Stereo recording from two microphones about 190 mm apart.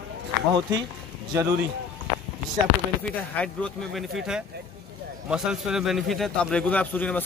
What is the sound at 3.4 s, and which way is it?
A man's voice, 5° left (ahead or behind).